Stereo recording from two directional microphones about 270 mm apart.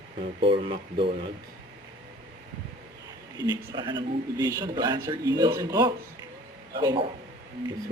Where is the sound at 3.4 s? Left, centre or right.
Centre.